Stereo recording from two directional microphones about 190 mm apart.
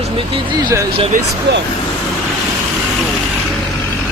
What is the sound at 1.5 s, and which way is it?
Speech, 60° right (ahead or behind).